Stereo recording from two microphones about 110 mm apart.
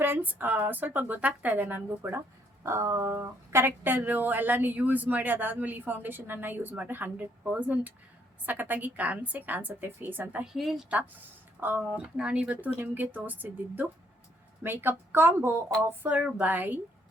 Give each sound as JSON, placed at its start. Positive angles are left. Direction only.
{"t": 0.0, "sound": "speech", "side_deg": -15}
{"t": 10.4, "sound": "a woman's voice", "side_deg": -5}
{"t": 10.8, "sound": "speech", "side_deg": -15}
{"t": 15.9, "sound": "speech", "side_deg": -10}